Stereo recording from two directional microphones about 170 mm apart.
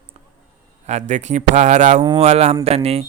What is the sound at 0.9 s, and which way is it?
Speech, 45° right (ahead or behind).